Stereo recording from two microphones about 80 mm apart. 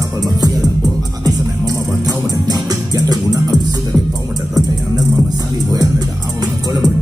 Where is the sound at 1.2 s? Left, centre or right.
Right.